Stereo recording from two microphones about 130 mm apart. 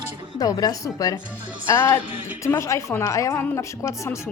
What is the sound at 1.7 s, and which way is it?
A woman's voice, 15° left (ahead or behind).